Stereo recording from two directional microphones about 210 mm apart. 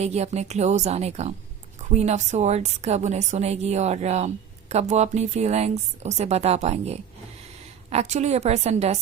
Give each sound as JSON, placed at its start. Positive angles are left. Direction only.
{"t": 0.0, "sound": "a woman's voice", "side_deg": -30}
{"t": 8.1, "sound": "a woman's voice", "side_deg": -30}